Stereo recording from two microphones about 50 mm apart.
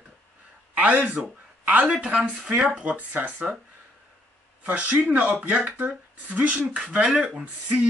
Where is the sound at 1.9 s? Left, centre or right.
Right.